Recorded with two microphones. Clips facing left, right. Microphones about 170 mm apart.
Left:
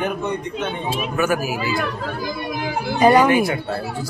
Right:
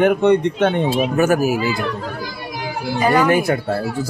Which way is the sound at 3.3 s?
50° right (ahead or behind).